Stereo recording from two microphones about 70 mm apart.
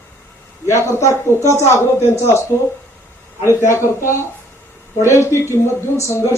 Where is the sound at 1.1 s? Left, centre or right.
Left.